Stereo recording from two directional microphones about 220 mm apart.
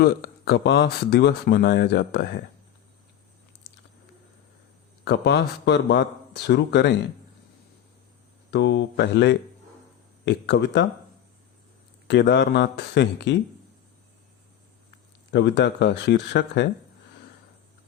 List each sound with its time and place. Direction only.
0.0 s speech: 45° left (ahead or behind)
5.0 s speech: 50° left (ahead or behind)
8.4 s speech: 50° left (ahead or behind)
12.0 s speech: 50° left (ahead or behind)
15.3 s speech: 50° left (ahead or behind)